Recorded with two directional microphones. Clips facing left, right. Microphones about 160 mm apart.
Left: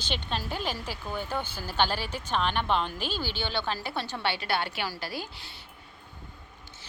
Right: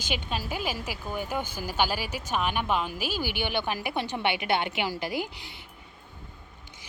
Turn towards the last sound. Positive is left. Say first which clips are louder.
# right 5 dB
turn(degrees=-20)  # may be behind; listen again after turning